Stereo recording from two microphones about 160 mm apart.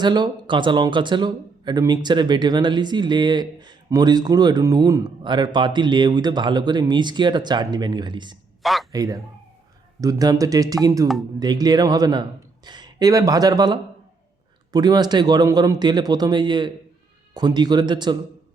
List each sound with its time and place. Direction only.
0.0 s speech: 30° right (ahead or behind)
8.6 s a man's voice: centre (ahead or behind)
8.9 s speech: 20° right (ahead or behind)